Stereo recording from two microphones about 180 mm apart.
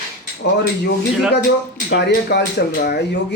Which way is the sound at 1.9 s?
65° left (ahead or behind).